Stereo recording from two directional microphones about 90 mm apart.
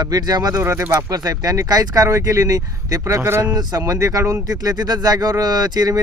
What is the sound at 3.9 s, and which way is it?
Speech, 40° right (ahead or behind).